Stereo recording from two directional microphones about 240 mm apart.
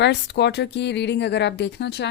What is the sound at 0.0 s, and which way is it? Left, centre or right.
A woman's voice, left.